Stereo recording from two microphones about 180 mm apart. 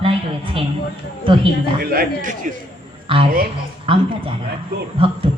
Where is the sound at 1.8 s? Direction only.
55° right (ahead or behind).